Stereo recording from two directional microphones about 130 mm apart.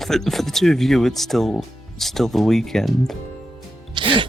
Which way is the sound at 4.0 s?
40° right (ahead or behind).